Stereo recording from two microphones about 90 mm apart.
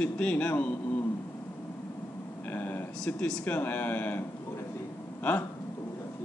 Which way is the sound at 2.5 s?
25° left (ahead or behind).